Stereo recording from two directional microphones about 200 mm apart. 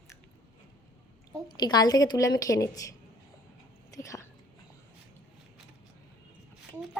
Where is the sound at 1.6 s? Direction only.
20° left (ahead or behind).